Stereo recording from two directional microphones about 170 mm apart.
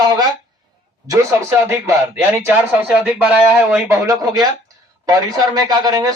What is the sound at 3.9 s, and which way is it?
Speech, 20° right (ahead or behind).